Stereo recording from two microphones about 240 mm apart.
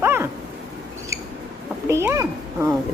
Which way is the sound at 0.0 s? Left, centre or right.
Centre.